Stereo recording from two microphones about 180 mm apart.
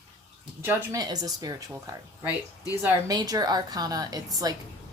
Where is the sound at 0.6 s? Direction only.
15° right (ahead or behind).